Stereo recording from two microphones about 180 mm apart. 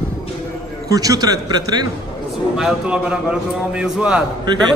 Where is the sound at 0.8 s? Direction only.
20° right (ahead or behind).